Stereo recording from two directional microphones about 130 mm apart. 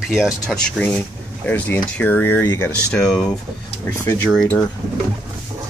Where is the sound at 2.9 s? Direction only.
5° left (ahead or behind).